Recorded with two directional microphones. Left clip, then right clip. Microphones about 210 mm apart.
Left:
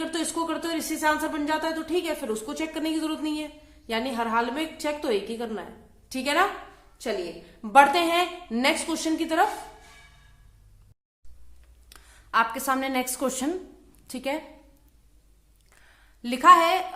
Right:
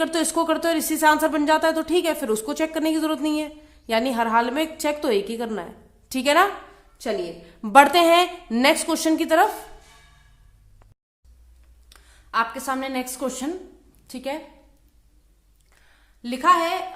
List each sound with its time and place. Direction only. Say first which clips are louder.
0.0 s speech: right 7 dB; 40° right (ahead or behind)
11.9 s a woman's voice: left 2 dB; 5° left (ahead or behind)
15.7 s a sound: left 1 dB; 5° left (ahead or behind)